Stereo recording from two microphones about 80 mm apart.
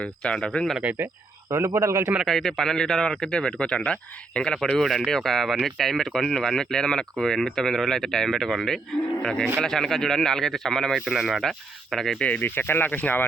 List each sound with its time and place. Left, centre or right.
0.0 s speech: centre
0.8 s speech: centre
1.8 s a man's voice: right
2.2 s speech: centre
12.2 s speech: left